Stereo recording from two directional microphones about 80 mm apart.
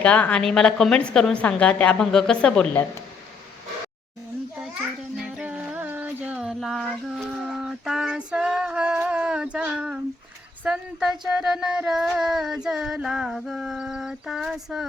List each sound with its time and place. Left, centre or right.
0.0 s a woman's voice: centre
5.4 s music: centre
10.7 s a sound: centre